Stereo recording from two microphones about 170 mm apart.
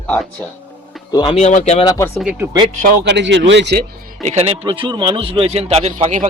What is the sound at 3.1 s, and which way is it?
Speech, 90° right.